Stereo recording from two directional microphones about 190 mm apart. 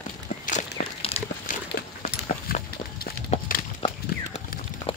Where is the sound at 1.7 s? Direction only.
50° left (ahead or behind).